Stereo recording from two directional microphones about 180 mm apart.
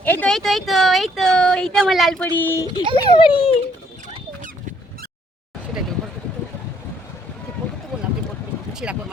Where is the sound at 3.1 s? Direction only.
30° left (ahead or behind).